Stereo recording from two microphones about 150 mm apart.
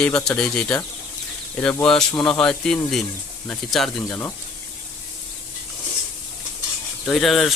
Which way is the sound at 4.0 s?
15° left (ahead or behind).